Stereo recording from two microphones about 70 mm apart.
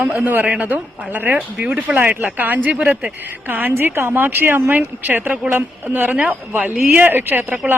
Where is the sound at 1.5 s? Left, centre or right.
Centre.